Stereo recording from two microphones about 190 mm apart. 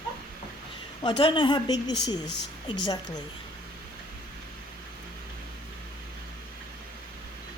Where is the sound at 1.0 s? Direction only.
30° left (ahead or behind).